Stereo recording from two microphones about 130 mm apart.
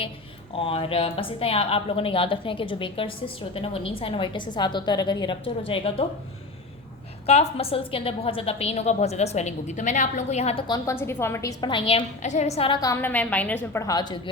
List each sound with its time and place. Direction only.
0.5 s a woman's voice: 45° left (ahead or behind)
7.3 s a woman's voice: 50° left (ahead or behind)
10.8 s a woman's voice: 20° left (ahead or behind)
11.6 s a woman's voice: 40° left (ahead or behind)
12.2 s a woman's voice: 65° left (ahead or behind)
12.7 s a woman's voice: 25° left (ahead or behind)
13.0 s a woman's voice: 15° left (ahead or behind)
13.8 s a woman's voice: 30° left (ahead or behind)